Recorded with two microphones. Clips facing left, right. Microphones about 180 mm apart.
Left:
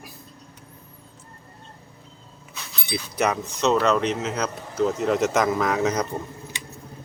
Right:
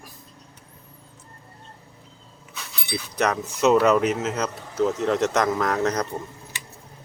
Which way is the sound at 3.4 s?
10° right (ahead or behind).